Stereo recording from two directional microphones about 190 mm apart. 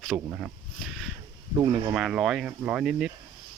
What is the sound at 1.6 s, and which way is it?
Speech, 20° right (ahead or behind).